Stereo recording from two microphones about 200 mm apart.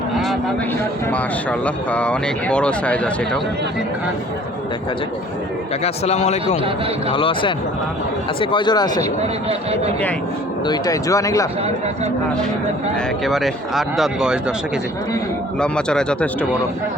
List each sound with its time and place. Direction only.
1.1 s speech: 5° left (ahead or behind)
5.8 s a man's voice: 35° left (ahead or behind)
9.0 s speech: 30° right (ahead or behind)
10.7 s speech: 15° left (ahead or behind)
13.2 s speech: centre (ahead or behind)
15.6 s speech: 5° left (ahead or behind)